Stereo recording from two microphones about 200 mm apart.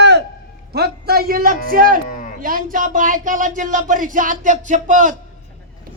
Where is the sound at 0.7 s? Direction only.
50° right (ahead or behind).